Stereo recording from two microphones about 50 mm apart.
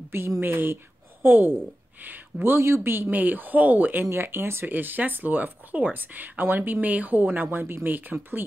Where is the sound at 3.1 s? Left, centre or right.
Right.